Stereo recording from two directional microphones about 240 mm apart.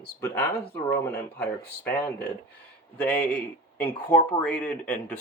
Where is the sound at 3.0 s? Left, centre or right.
Centre.